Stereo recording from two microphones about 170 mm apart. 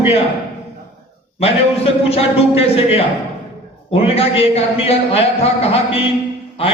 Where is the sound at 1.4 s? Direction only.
35° left (ahead or behind).